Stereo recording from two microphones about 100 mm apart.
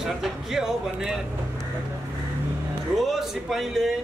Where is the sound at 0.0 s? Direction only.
5° right (ahead or behind).